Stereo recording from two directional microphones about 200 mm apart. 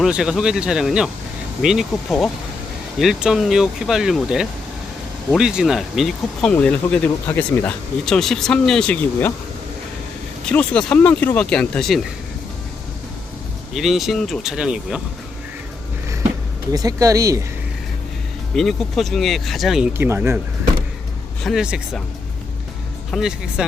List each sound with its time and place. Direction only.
0.0 s speech: 5° right (ahead or behind)
10.5 s speech: 5° left (ahead or behind)
13.7 s speech: centre (ahead or behind)
16.7 s speech: 15° right (ahead or behind)
18.5 s speech: centre (ahead or behind)
21.4 s speech: 5° right (ahead or behind)
23.1 s speech: 5° right (ahead or behind)